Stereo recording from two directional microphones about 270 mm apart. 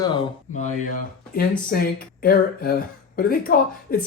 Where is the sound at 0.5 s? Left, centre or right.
Left.